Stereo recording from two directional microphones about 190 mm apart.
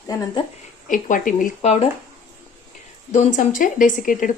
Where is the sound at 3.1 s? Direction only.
40° left (ahead or behind).